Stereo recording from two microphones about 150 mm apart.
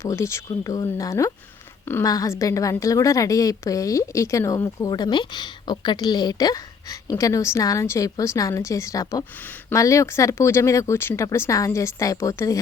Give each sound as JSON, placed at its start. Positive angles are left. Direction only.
{"t": 0.0, "sound": "a woman's voice", "side_deg": 20}